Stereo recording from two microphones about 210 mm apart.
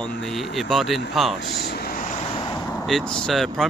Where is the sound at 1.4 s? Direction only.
50° left (ahead or behind); by 2.7 s 20° left (ahead or behind).